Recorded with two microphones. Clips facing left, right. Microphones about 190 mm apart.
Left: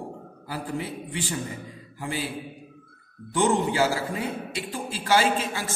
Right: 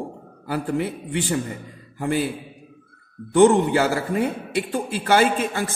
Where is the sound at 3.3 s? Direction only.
60° right (ahead or behind).